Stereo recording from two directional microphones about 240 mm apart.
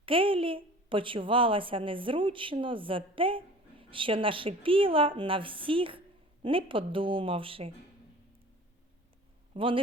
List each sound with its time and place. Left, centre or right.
0.0 s a woman's voice: right
9.6 s a woman's voice: right